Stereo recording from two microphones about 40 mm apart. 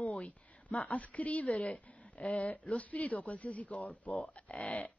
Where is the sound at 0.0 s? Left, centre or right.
Left.